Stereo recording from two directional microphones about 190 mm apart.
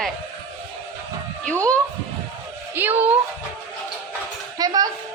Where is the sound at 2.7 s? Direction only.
10° right (ahead or behind).